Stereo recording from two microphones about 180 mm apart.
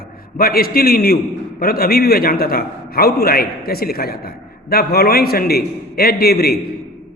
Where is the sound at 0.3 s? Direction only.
55° left (ahead or behind).